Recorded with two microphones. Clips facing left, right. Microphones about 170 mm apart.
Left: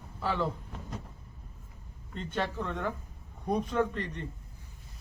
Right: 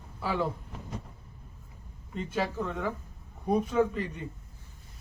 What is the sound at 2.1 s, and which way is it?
A man's voice, 5° right (ahead or behind).